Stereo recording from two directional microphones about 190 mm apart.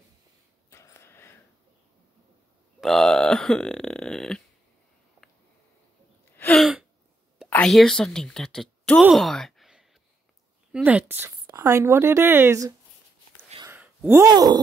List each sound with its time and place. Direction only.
0.7 s a sound: 15° left (ahead or behind)
2.8 s burping: centre (ahead or behind)
6.3 s gasp: 10° left (ahead or behind)
6.6 s gasp: 5° right (ahead or behind)
7.3 s a woman's voice: 5° left (ahead or behind); by 12.7 s 15° right (ahead or behind)
13.7 s a sound: 10° right (ahead or behind)